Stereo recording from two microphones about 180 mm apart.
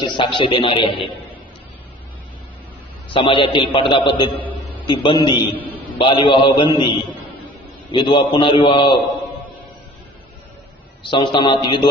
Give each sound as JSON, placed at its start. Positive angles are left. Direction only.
{"t": 0.0, "sound": "a man's voice", "side_deg": 25}
{"t": 3.1, "sound": "a man's voice", "side_deg": 30}
{"t": 7.9, "sound": "a man's voice", "side_deg": 25}
{"t": 11.0, "sound": "a man's voice", "side_deg": 25}